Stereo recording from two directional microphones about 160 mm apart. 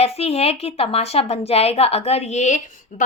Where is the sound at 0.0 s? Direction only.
40° left (ahead or behind).